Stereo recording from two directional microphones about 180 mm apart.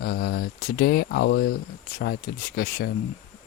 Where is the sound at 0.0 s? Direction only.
60° left (ahead or behind).